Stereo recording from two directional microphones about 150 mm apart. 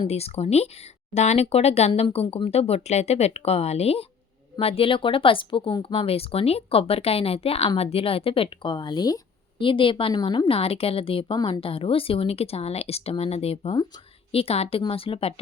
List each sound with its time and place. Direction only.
0.1 s speech: 40° left (ahead or behind)